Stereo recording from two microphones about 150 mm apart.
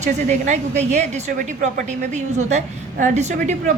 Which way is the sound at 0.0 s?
50° right (ahead or behind).